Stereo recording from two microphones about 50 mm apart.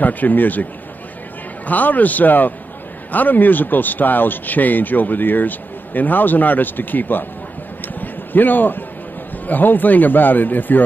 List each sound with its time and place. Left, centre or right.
0.0 s speech: left
1.7 s speech: left
7.9 s a sound: left
9.5 s speech: left